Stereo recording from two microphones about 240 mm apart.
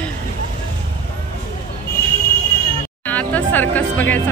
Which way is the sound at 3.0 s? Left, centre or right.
Centre.